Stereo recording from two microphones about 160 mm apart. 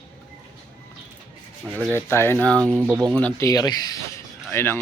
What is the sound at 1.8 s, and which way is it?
Speech, 10° left (ahead or behind).